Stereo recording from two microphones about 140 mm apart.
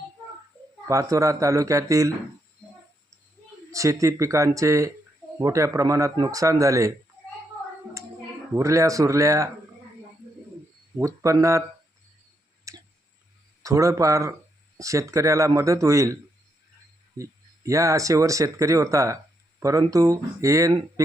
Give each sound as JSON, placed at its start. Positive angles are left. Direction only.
{"t": 0.9, "sound": "speech", "side_deg": -25}
{"t": 3.7, "sound": "speech", "side_deg": -20}
{"t": 8.5, "sound": "speech", "side_deg": -20}
{"t": 11.0, "sound": "speech", "side_deg": -20}
{"t": 12.7, "sound": "tick", "side_deg": -25}
{"t": 13.6, "sound": "speech", "side_deg": -25}
{"t": 17.2, "sound": "speech", "side_deg": -20}